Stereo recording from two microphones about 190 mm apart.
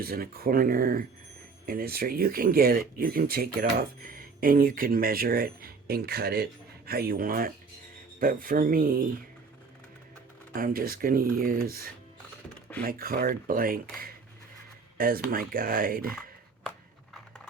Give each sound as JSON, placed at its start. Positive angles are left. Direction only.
{"t": 0.0, "sound": "speech", "side_deg": -50}
{"t": 10.5, "sound": "speech", "side_deg": -50}